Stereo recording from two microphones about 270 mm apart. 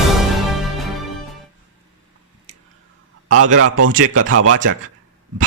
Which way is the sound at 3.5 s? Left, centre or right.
Right.